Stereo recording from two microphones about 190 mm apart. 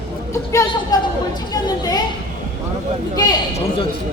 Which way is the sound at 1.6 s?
20° left (ahead or behind).